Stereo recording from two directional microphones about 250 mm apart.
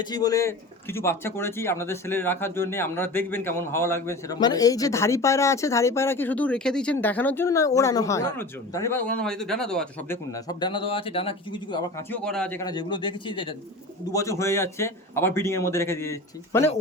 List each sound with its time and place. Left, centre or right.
0.0 s speech: centre
10.3 s speech: centre
12.1 s speech: centre